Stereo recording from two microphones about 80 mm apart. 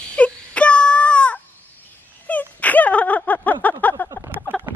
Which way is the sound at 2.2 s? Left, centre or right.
Centre.